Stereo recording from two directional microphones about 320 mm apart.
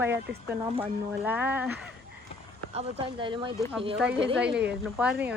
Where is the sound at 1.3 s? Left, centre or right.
Centre.